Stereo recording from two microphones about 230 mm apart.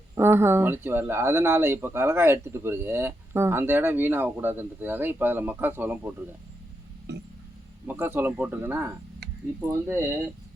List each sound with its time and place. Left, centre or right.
0.2 s speech: centre
7.1 s a sound: right
7.9 s speech: centre